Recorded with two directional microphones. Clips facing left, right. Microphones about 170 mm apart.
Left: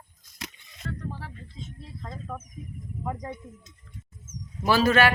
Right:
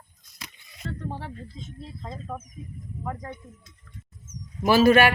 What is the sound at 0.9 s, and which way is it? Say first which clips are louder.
Speech: right 2 dB; 30° right (ahead or behind).